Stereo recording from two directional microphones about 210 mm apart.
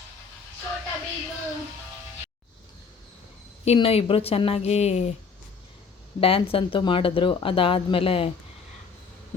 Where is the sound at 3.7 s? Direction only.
30° left (ahead or behind).